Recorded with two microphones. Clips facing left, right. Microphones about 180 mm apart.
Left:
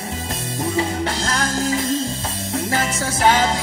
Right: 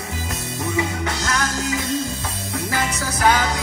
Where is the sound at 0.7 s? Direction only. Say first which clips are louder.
Left 2 dB; 30° left (ahead or behind).